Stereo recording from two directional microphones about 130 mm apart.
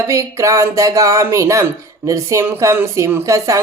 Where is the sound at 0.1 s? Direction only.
25° right (ahead or behind).